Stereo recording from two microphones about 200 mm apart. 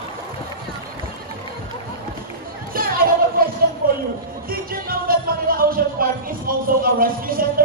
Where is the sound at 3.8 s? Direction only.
45° right (ahead or behind).